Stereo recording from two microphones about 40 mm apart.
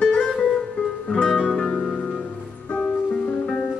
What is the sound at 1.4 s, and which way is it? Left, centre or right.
Music, left.